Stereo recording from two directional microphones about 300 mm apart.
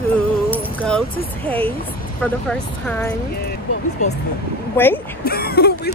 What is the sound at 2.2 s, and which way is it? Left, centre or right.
Speech, centre.